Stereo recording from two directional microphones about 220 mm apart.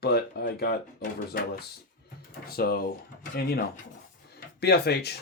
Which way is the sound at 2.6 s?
45° left (ahead or behind).